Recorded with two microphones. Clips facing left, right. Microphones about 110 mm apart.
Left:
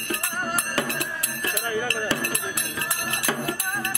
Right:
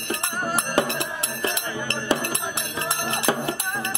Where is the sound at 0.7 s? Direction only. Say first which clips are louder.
Right 4 dB; 25° right (ahead or behind).